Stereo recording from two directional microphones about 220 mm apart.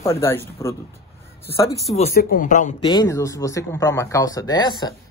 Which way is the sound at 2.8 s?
15° left (ahead or behind).